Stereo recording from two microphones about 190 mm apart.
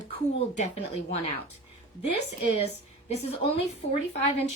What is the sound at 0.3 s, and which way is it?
Speech, 35° left (ahead or behind).